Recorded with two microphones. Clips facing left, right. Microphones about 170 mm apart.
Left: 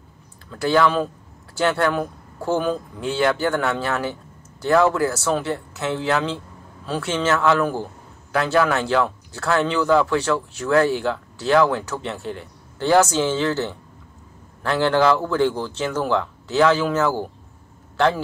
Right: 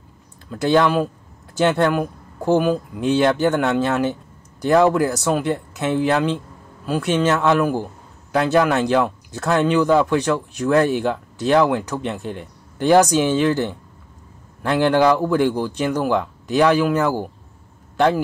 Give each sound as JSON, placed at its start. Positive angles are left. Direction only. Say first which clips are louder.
{"t": 0.5, "sound": "speech", "louder": "right 2 dB", "side_deg": -20}